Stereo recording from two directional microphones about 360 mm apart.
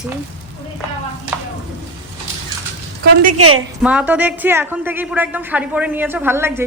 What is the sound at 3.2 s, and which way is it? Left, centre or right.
Speech, right.